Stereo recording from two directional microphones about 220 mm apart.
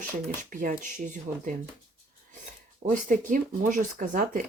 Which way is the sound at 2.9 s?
35° right (ahead or behind).